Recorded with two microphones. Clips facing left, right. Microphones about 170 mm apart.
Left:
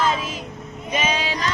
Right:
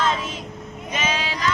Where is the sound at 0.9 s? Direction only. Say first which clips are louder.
Left 3 dB; 15° left (ahead or behind).